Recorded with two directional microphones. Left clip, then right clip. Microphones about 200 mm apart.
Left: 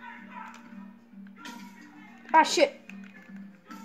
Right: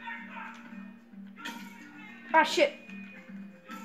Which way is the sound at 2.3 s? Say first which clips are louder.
Left 3 dB; 50° left (ahead or behind).